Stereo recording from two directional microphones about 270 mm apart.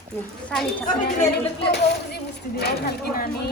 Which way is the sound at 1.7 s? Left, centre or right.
Left.